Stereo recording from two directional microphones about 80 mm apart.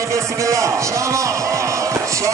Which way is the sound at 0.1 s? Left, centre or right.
Right.